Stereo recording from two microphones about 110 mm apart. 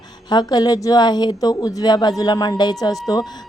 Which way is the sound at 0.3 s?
40° left (ahead or behind).